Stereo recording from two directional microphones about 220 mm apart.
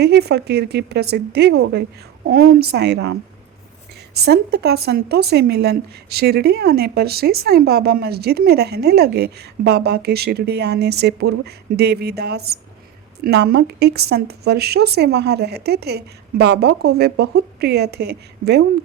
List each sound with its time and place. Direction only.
0.0 s a woman's voice: 50° right (ahead or behind)
4.1 s a woman's voice: 45° right (ahead or behind)